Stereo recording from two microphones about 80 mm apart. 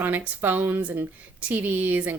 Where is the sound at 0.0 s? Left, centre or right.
Right.